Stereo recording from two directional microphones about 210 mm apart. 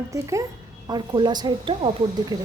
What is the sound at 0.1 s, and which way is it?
A woman's voice, 15° right (ahead or behind).